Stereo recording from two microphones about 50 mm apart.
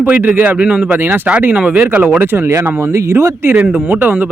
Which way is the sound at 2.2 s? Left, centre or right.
Right.